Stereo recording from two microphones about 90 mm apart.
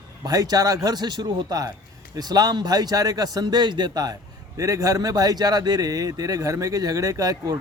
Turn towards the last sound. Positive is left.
turn(degrees=-45)  # may be behind; listen again after turning